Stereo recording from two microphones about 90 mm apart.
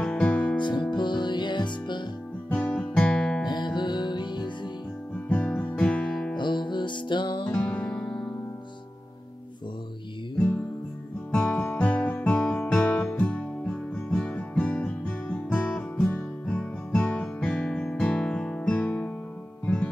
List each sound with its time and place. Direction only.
0.0 s music: 15° left (ahead or behind)
0.6 s music: 60° left (ahead or behind)
2.5 s guitar: 20° left (ahead or behind)
3.4 s music: 55° left (ahead or behind)
5.6 s music: 20° left (ahead or behind)
6.3 s music: 60° left (ahead or behind)
7.4 s music: 20° left (ahead or behind)
11.3 s guitar: 15° left (ahead or behind)
18.8 s music: 20° left (ahead or behind)